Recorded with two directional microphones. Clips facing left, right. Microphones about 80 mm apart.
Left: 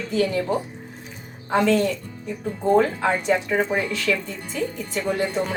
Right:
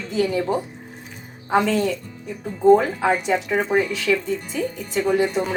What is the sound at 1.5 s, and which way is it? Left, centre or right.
A woman's voice, centre.